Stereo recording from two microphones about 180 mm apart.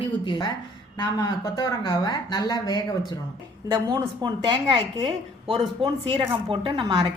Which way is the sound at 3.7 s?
15° right (ahead or behind).